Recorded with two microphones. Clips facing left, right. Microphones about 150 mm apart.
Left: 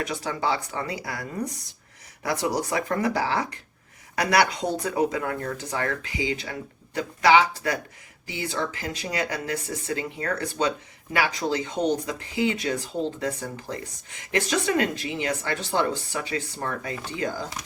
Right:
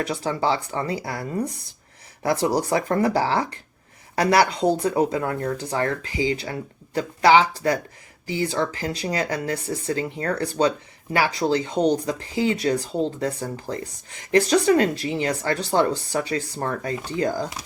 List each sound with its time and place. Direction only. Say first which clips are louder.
0.0 s speech: right 4 dB; 30° right (ahead or behind)